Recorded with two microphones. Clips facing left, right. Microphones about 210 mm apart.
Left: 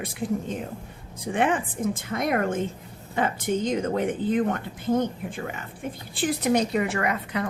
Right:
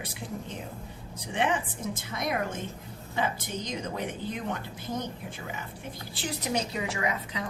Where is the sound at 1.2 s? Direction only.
50° left (ahead or behind).